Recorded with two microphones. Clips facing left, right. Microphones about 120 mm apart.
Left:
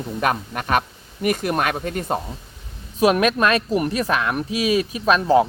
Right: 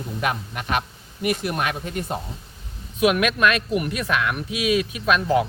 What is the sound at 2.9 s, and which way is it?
Speech, 35° left (ahead or behind).